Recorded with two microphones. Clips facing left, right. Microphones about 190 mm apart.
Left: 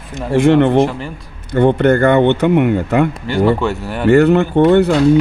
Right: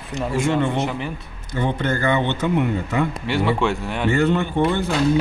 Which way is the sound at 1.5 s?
65° left (ahead or behind).